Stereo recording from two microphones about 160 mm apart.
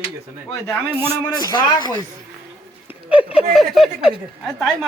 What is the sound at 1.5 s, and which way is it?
Speech, 25° left (ahead or behind).